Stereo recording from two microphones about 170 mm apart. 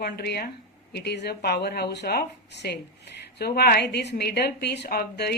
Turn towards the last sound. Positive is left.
turn(degrees=70)  # may be behind; listen again after turning